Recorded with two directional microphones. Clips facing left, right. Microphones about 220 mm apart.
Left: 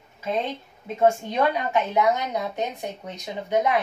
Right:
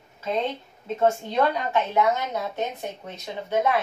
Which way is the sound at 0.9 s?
10° left (ahead or behind).